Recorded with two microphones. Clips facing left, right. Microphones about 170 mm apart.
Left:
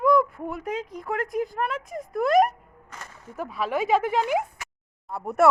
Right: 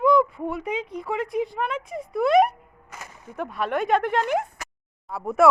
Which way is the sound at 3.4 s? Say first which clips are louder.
Right 1 dB; centre (ahead or behind).